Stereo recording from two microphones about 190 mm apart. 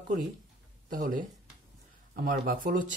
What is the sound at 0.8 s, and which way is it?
Speech, 45° right (ahead or behind).